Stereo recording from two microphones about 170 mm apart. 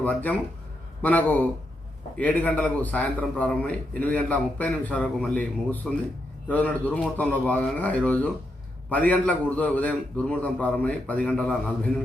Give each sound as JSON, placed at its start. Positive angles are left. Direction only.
{"t": 0.0, "sound": "a man's voice", "side_deg": 10}